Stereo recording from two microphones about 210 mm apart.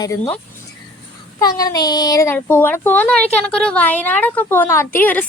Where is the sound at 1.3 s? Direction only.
20° left (ahead or behind).